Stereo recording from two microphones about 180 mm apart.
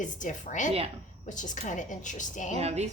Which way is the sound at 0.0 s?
45° left (ahead or behind).